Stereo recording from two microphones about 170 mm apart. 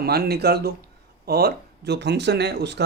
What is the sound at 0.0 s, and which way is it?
Speech, 65° right (ahead or behind).